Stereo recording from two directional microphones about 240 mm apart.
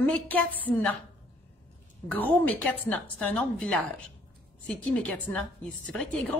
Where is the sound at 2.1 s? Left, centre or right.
Centre.